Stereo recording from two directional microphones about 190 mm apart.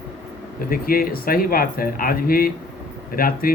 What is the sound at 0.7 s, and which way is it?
Speech, 50° left (ahead or behind).